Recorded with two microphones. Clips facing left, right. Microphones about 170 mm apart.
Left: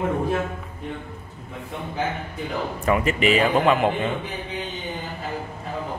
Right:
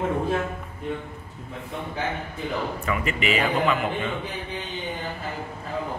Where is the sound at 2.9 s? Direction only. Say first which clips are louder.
Left 7 dB; 40° left (ahead or behind).